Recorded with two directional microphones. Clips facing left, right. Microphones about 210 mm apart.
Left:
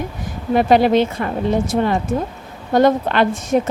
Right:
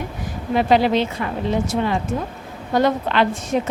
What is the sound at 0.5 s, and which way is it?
Speech, 50° left (ahead or behind).